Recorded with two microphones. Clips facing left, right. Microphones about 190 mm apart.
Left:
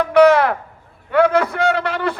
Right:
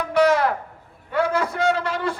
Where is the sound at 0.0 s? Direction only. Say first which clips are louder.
Left 6 dB; 65° left (ahead or behind).